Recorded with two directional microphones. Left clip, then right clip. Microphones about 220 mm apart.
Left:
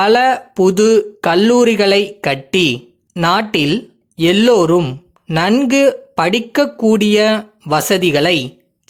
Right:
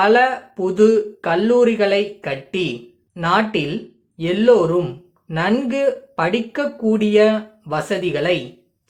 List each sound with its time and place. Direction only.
0.0 s speech: 50° left (ahead or behind)